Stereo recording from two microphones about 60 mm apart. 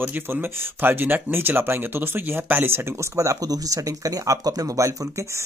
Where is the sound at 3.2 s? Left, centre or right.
Right.